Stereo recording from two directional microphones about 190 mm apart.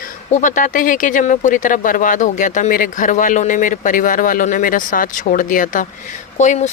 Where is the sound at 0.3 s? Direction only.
40° left (ahead or behind).